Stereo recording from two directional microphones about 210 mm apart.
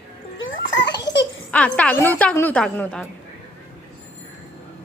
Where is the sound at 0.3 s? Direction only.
65° left (ahead or behind).